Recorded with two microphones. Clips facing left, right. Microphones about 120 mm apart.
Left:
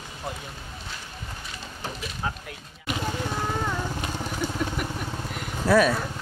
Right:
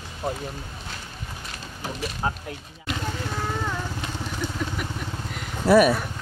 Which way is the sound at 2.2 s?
35° right (ahead or behind).